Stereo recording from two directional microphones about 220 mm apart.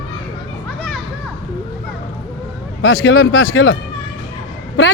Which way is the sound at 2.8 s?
65° left (ahead or behind).